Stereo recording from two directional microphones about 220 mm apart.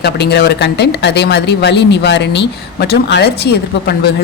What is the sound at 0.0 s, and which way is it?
Speech, 50° left (ahead or behind).